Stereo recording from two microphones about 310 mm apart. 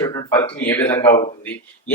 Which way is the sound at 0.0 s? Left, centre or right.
Centre.